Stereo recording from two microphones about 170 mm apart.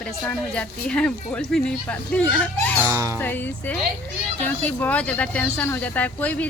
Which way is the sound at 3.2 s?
10° left (ahead or behind).